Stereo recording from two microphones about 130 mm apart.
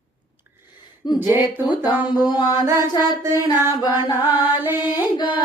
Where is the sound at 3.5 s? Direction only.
20° right (ahead or behind).